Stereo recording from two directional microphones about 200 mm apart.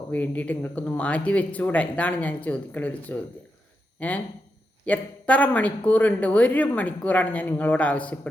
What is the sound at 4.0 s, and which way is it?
Speech, 10° left (ahead or behind).